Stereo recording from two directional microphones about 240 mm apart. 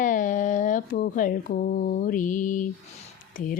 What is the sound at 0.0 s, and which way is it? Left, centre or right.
A woman's voice, left.